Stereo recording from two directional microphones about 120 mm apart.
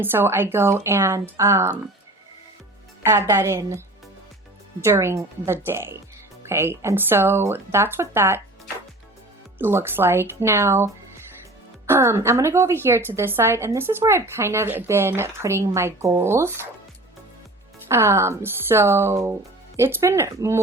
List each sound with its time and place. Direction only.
0.0 s a woman's voice: 20° right (ahead or behind)
3.0 s a woman's voice: 25° right (ahead or behind)
9.6 s a woman's voice: 20° right (ahead or behind)
17.7 s a woman's voice: 20° right (ahead or behind)